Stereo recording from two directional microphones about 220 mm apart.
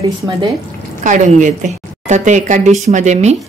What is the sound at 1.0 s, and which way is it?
A woman's voice, 35° right (ahead or behind).